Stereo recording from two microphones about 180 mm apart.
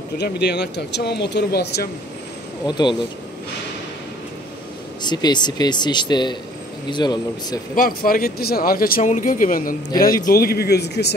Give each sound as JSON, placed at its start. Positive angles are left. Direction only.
{"t": 0.2, "sound": "speech", "side_deg": 70}
{"t": 2.6, "sound": "speech", "side_deg": 25}
{"t": 5.0, "sound": "speech", "side_deg": 25}
{"t": 7.7, "sound": "speech", "side_deg": 50}